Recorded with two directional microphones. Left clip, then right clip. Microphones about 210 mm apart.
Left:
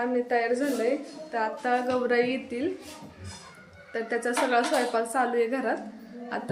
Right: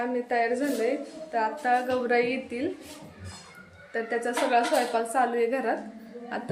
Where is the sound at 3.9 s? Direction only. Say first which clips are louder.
Even; 10° left (ahead or behind).